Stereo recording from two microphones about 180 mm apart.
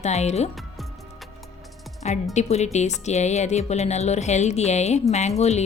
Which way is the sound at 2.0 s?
40° left (ahead or behind).